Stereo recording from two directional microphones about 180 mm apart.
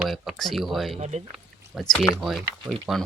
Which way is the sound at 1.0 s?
40° right (ahead or behind).